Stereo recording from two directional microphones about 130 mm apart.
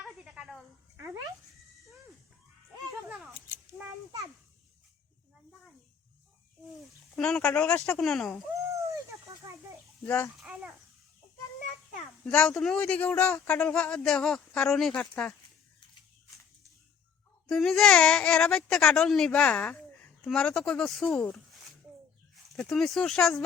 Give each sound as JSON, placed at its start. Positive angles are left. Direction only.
{"t": 0.0, "sound": "cricket", "side_deg": -5}
{"t": 0.9, "sound": "speech", "side_deg": -25}
{"t": 3.1, "sound": "a sound", "side_deg": -5}
{"t": 3.8, "sound": "a child's voice", "side_deg": -25}
{"t": 7.2, "sound": "speech", "side_deg": 5}
{"t": 9.4, "sound": "a sound", "side_deg": -25}
{"t": 10.4, "sound": "speech", "side_deg": -5}
{"t": 12.2, "sound": "speech", "side_deg": 10}
{"t": 17.5, "sound": "speech", "side_deg": 5}
{"t": 22.4, "sound": "speech", "side_deg": 5}